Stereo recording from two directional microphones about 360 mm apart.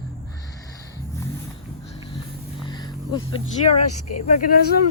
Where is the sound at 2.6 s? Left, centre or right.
Centre.